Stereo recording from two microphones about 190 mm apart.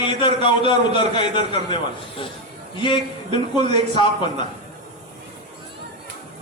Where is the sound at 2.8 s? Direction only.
25° left (ahead or behind).